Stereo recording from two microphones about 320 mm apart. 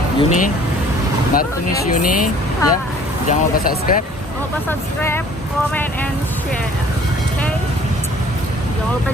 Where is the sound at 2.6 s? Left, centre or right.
Centre.